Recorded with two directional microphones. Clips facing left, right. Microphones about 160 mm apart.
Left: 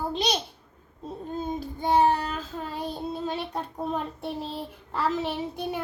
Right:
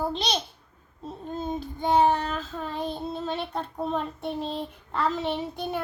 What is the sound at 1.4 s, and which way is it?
Child singing, 10° left (ahead or behind).